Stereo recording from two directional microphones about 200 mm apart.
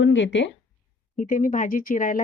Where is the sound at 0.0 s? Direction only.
65° left (ahead or behind).